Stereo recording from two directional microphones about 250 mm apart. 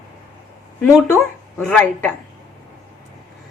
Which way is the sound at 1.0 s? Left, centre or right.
Centre.